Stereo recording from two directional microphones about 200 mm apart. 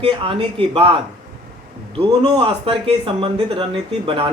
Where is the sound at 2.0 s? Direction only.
25° right (ahead or behind).